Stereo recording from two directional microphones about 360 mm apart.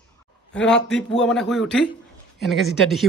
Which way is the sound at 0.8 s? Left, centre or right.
Centre.